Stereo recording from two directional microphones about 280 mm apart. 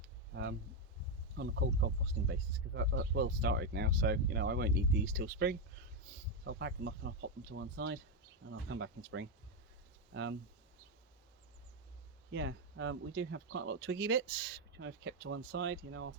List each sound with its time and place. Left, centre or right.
1.4 s speech: right
12.3 s speech: right